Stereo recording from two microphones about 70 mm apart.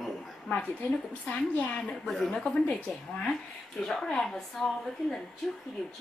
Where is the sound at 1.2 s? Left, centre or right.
Centre.